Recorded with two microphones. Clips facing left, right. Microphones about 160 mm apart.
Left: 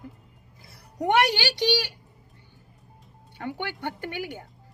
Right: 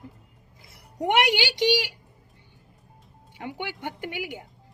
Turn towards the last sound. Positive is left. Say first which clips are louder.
# even
turn(degrees=-15)  # may be behind; listen again after turning